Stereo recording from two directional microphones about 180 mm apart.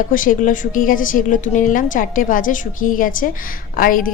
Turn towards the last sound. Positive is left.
turn(degrees=50)  # may be behind; listen again after turning